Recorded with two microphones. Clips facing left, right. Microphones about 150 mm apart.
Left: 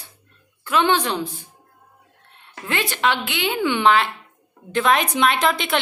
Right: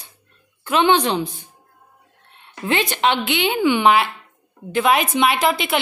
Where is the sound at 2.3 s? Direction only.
20° right (ahead or behind).